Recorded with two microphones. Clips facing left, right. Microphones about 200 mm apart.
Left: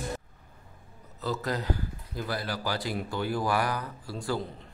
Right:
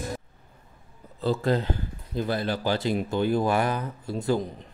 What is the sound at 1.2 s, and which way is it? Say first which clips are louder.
Speech: right 6 dB; 30° right (ahead or behind).